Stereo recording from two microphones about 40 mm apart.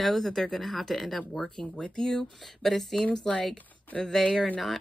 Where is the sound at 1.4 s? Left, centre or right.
Centre.